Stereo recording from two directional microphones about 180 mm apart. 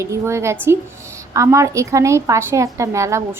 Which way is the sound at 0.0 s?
15° right (ahead or behind).